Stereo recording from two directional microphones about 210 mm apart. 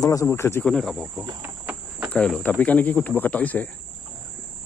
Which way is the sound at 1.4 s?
10° right (ahead or behind).